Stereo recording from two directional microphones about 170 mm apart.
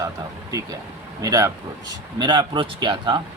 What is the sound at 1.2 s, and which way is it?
Speech, 20° right (ahead or behind).